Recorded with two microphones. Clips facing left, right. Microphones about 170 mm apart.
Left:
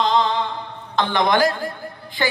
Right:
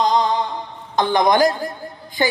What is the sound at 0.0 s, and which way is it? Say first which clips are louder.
Music: right 1 dB; 15° right (ahead or behind).